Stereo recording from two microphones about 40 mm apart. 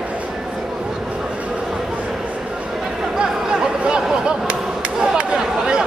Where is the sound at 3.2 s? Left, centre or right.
Right.